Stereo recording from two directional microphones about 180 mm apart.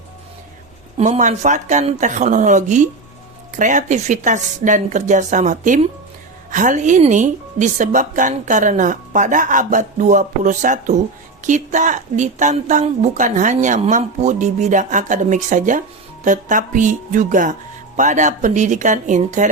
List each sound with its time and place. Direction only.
0.9 s speech: 40° right (ahead or behind)